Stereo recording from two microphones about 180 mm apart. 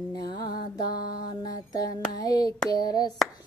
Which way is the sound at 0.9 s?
25° left (ahead or behind).